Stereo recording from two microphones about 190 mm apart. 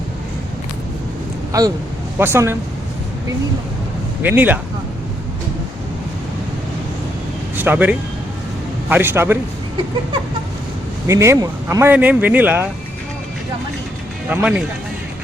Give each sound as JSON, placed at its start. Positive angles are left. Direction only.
{"t": 1.5, "sound": "speech", "side_deg": -15}
{"t": 4.2, "sound": "speech", "side_deg": -10}
{"t": 7.5, "sound": "speech", "side_deg": -10}
{"t": 11.1, "sound": "speech", "side_deg": -15}
{"t": 14.3, "sound": "speech", "side_deg": -5}